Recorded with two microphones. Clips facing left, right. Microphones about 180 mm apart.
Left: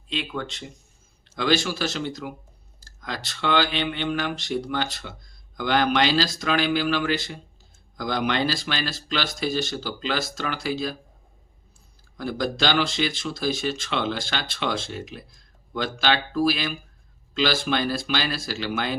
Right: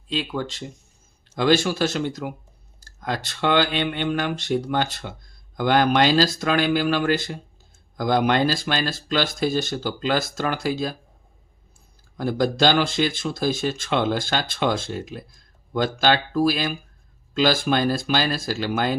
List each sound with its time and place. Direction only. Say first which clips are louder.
0.1 s speech: right 4 dB; 35° right (ahead or behind)
1.4 s speech: right 4 dB; 50° right (ahead or behind)
12.1 s speech: right 5 dB; 50° right (ahead or behind)